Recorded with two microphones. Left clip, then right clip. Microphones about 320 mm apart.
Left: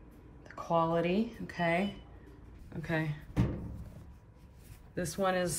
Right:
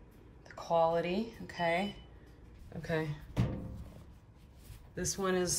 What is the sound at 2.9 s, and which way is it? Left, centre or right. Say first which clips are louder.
Speech: left 1 dB; centre.